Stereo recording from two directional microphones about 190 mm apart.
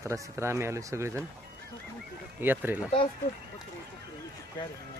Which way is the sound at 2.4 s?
10° right (ahead or behind).